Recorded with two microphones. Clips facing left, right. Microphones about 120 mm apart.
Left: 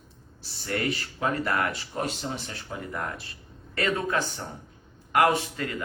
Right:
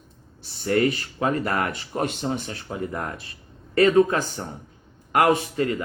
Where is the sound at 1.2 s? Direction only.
40° right (ahead or behind).